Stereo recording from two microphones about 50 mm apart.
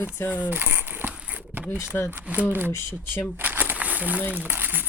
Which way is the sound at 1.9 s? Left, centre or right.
Left.